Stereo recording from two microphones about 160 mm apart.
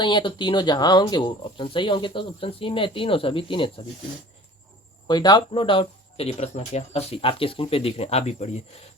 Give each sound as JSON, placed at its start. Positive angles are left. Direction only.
{"t": 0.0, "sound": "speech", "side_deg": 30}
{"t": 5.0, "sound": "speech", "side_deg": 25}